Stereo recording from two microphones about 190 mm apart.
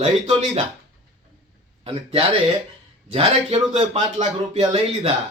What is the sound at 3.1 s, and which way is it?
A man's voice, 30° right (ahead or behind).